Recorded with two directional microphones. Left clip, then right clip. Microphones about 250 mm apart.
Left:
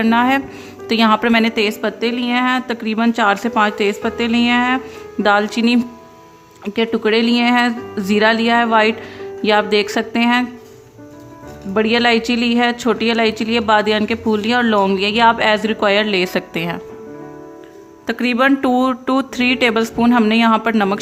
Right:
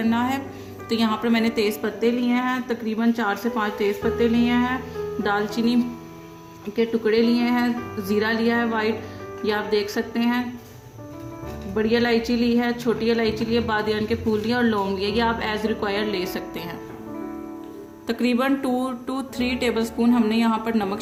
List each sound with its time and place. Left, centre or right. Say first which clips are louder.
0.0 s a woman's voice: left 9 dB; left
11.7 s a woman's voice: left 7 dB; left
18.0 s a woman's voice: left 7 dB; left